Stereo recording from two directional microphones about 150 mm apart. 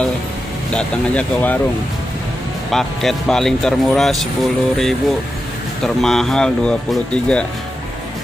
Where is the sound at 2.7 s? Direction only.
Centre (ahead or behind).